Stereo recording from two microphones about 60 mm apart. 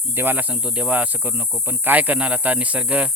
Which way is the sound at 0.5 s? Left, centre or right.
Centre.